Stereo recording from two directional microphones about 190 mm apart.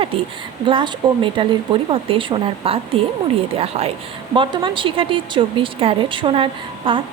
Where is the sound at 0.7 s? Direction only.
25° right (ahead or behind).